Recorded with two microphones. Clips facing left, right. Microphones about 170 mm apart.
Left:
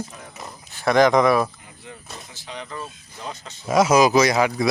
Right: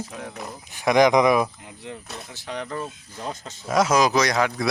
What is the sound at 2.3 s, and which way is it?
Speech, 55° right (ahead or behind).